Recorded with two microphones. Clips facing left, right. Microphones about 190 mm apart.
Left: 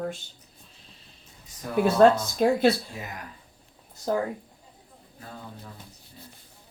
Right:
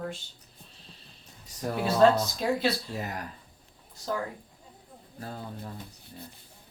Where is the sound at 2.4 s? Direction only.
55° left (ahead or behind).